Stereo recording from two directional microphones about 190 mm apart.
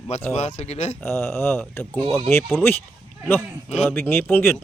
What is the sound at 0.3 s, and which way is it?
Speech, 35° left (ahead or behind).